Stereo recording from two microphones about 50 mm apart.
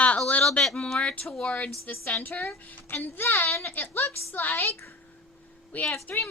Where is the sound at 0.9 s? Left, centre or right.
Left.